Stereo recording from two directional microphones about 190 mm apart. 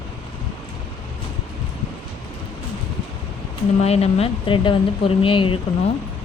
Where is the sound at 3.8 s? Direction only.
35° left (ahead or behind).